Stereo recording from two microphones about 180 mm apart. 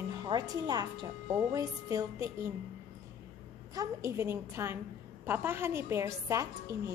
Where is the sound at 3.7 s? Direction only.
20° right (ahead or behind).